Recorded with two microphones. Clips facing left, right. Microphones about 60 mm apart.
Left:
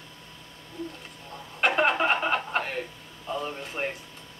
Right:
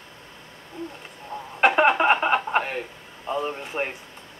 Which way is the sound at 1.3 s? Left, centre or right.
Centre.